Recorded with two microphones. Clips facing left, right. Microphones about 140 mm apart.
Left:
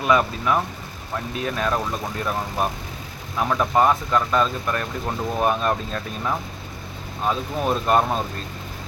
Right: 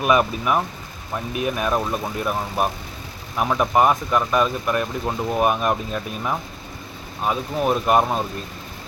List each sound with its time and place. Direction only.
0.0 s speech: 15° right (ahead or behind)